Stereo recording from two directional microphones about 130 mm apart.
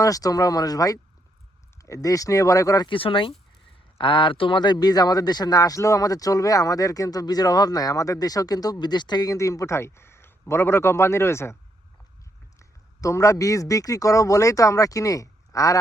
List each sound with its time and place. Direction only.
0.0 s speech: 25° left (ahead or behind)
12.5 s a man's voice: 25° left (ahead or behind)